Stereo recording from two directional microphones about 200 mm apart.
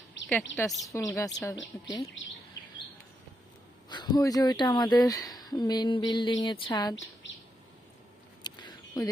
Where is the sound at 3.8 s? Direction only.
20° left (ahead or behind).